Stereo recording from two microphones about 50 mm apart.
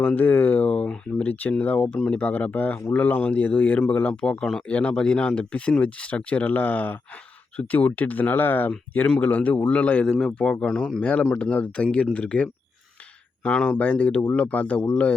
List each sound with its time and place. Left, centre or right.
0.1 s speech: left
9.0 s speech: left
13.5 s speech: centre
13.7 s speech: left